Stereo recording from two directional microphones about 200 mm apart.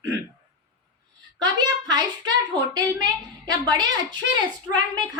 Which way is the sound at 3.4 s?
20° right (ahead or behind).